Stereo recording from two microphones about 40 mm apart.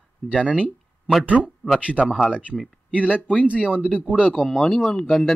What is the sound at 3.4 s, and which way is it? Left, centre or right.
Speech, right.